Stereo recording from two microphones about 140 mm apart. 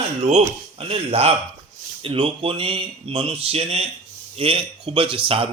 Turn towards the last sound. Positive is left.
turn(degrees=-40)  # may be behind; listen again after turning